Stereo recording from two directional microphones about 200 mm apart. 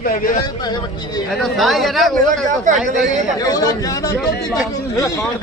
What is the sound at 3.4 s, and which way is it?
Speech, 20° left (ahead or behind).